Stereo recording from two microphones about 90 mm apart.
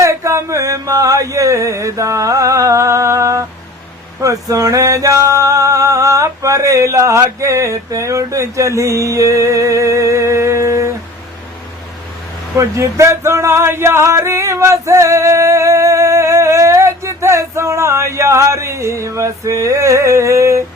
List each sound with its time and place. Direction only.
0.0 s male singing: 35° right (ahead or behind)
12.5 s speech: 35° right (ahead or behind)